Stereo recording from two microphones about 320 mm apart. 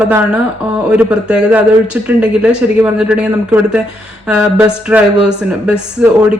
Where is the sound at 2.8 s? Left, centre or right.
Centre.